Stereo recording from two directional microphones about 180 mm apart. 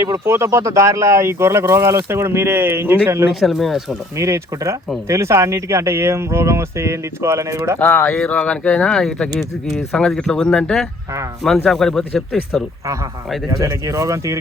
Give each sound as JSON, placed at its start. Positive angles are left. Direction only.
{"t": 0.0, "sound": "speech", "side_deg": -15}
{"t": 3.4, "sound": "speech", "side_deg": 0}
{"t": 4.2, "sound": "speech", "side_deg": -15}
{"t": 7.8, "sound": "speech", "side_deg": 10}
{"t": 13.6, "sound": "speech", "side_deg": -15}